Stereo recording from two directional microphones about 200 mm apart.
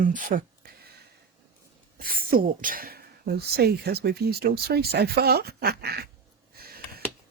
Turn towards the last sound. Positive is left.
turn(degrees=-50)  # may be behind; listen again after turning